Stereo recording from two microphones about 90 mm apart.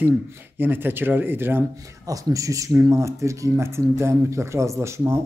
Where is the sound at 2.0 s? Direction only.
40° right (ahead or behind).